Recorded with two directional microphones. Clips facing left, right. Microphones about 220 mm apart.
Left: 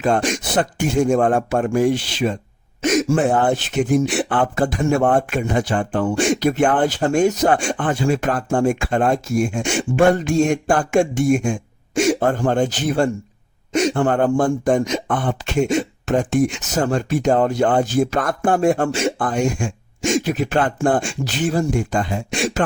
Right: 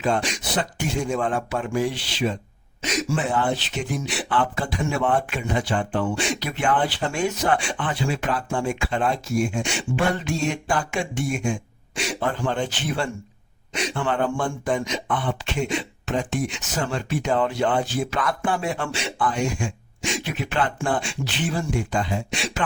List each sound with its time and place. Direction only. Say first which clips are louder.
0.0 s speech: left 5 dB; 50° left (ahead or behind)